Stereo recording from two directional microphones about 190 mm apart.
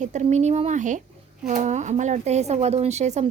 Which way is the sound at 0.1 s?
35° right (ahead or behind).